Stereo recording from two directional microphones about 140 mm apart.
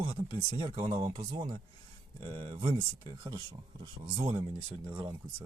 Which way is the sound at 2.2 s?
40° right (ahead or behind).